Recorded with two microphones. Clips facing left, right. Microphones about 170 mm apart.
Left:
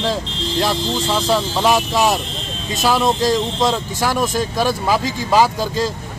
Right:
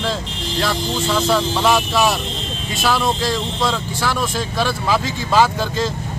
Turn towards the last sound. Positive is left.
turn(degrees=10)  # may be behind; listen again after turning